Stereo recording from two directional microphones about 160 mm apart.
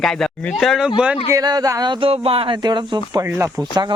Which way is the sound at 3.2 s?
15° right (ahead or behind).